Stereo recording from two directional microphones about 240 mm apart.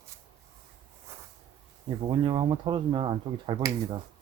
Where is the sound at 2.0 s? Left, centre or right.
Right.